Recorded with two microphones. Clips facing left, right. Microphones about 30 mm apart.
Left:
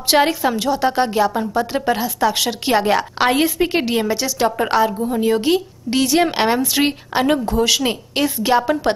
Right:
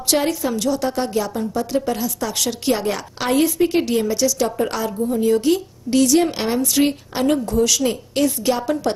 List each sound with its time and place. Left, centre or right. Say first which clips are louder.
0.1 s a woman's voice: left 4 dB; left